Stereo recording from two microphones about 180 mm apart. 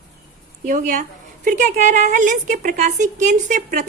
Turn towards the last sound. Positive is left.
turn(degrees=-45)  # may be behind; listen again after turning